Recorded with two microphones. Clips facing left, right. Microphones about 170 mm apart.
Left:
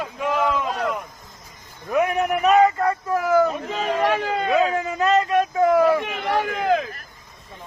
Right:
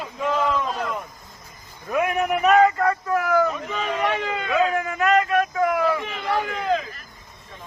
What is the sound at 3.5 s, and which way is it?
Speech, 35° left (ahead or behind).